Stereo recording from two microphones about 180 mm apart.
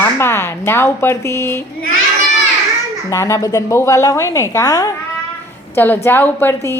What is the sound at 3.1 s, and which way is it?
A woman's voice, 15° left (ahead or behind).